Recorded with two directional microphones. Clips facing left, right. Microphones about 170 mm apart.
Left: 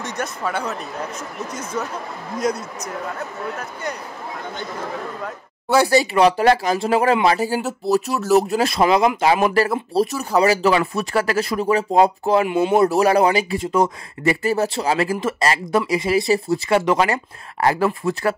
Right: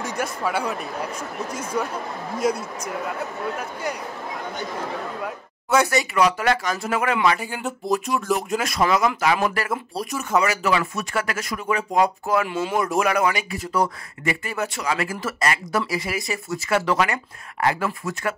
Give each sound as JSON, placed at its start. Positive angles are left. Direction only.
{"t": 0.0, "sound": "speech", "side_deg": -10}
{"t": 5.8, "sound": "speech", "side_deg": 30}
{"t": 12.4, "sound": "speech", "side_deg": 15}
{"t": 12.7, "sound": "speech", "side_deg": 35}
{"t": 14.2, "sound": "speech", "side_deg": 35}